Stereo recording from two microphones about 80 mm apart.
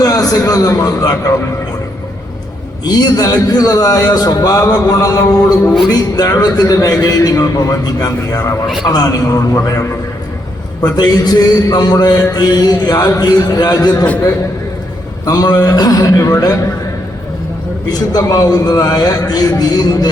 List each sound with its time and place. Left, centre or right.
0.0 s a man's voice: left
2.8 s a man's voice: left
6.6 s a man's voice: left
10.8 s a man's voice: left
15.3 s a man's voice: left
17.8 s a man's voice: left